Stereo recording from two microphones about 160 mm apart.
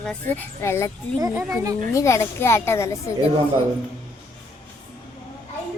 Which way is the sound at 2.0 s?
20° left (ahead or behind).